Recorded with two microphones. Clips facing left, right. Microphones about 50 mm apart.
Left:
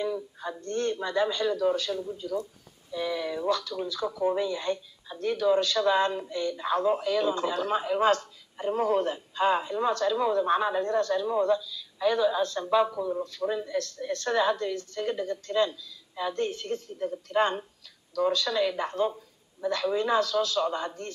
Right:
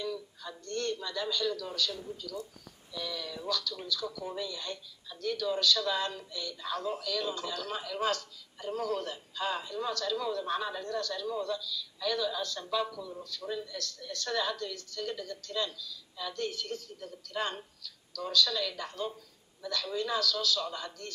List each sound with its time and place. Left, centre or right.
0.0 s speech: left